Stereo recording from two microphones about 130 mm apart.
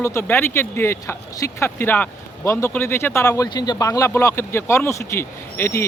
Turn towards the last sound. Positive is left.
turn(degrees=20)  # may be behind; listen again after turning